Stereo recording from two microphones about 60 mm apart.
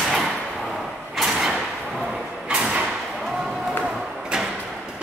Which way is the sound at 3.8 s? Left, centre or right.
Centre.